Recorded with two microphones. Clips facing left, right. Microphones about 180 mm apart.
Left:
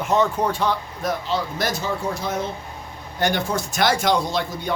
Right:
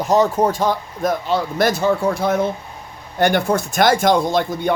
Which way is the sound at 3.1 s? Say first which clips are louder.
Right 6 dB; 55° right (ahead or behind).